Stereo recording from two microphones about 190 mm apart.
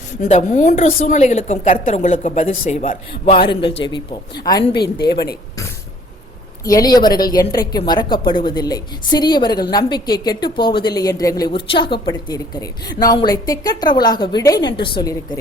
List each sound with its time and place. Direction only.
0.2 s a woman's voice: 40° left (ahead or behind)
3.1 s a woman's voice: 30° left (ahead or behind)
5.0 s a woman's voice: 55° left (ahead or behind)
6.7 s a woman's voice: 20° left (ahead or behind)